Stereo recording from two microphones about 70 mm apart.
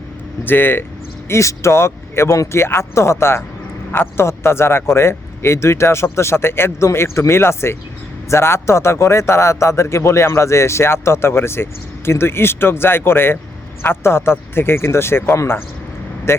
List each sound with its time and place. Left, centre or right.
0.4 s speech: left
1.3 s speech: left